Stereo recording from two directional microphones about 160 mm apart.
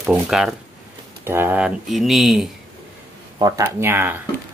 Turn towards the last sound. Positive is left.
turn(degrees=-15)  # may be behind; listen again after turning